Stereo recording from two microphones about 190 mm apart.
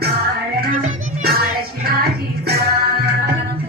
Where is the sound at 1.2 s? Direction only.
55° right (ahead or behind).